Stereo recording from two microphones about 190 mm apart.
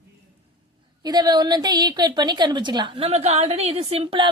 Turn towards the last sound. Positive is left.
turn(degrees=-30)  # may be behind; listen again after turning